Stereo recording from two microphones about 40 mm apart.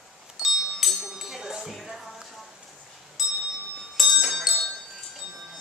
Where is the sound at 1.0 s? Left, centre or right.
Centre.